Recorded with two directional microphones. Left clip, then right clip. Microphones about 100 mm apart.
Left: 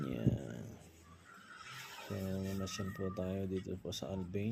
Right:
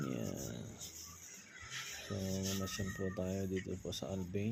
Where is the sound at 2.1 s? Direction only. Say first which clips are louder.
Even; 5° right (ahead or behind).